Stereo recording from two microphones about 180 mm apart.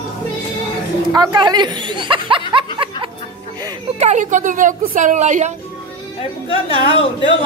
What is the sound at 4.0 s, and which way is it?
A woman's voice, 40° right (ahead or behind).